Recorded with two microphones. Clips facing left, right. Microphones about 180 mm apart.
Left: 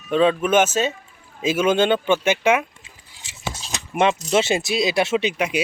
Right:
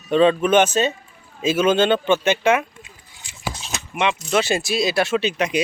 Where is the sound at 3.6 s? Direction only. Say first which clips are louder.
Left 4 dB; 40° left (ahead or behind).